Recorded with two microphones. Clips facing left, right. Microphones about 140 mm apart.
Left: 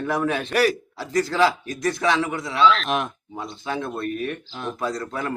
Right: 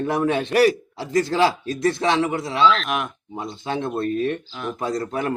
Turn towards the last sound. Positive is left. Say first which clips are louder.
# right 3 dB
turn(degrees=-25)  # may be behind; listen again after turning